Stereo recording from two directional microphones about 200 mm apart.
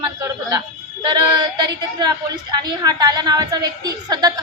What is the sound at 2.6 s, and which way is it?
A woman's voice, 20° right (ahead or behind).